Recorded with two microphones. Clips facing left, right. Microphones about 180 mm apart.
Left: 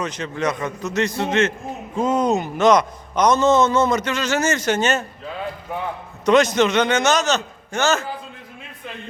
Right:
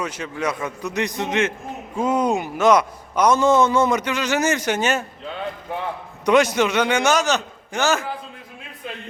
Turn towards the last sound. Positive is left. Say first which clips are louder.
# left 1 dB
turn(degrees=-15)  # may be behind; listen again after turning